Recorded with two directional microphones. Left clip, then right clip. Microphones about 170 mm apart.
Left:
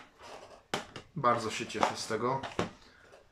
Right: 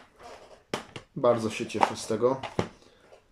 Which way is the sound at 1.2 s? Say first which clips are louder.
Right 5 dB; 20° right (ahead or behind).